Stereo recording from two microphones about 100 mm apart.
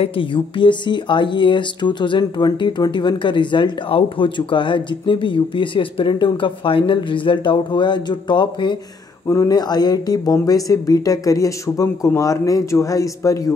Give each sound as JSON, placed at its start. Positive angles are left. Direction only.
{"t": 0.0, "sound": "speech", "side_deg": 60}
{"t": 9.3, "sound": "speech", "side_deg": 35}